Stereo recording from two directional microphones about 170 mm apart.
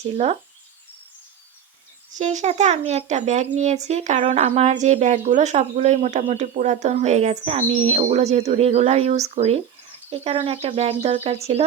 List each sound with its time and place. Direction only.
2.1 s speech: 45° right (ahead or behind)